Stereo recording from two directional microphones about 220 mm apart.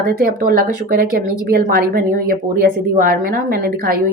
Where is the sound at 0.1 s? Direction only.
40° right (ahead or behind).